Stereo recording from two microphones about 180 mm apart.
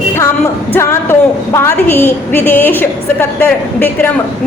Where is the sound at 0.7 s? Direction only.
15° left (ahead or behind).